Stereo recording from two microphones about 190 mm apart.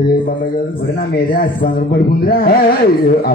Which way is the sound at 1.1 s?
50° left (ahead or behind).